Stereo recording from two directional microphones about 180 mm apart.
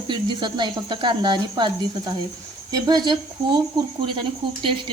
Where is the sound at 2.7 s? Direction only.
20° right (ahead or behind).